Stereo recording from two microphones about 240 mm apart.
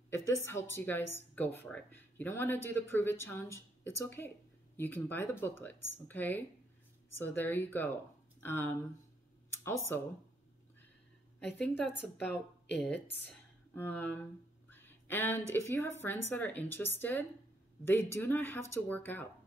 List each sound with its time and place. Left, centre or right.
0.1 s a woman's voice: centre
9.9 s a woman's voice: centre
11.3 s a woman's voice: centre
12.2 s a woman's voice: left
12.8 s a woman's voice: centre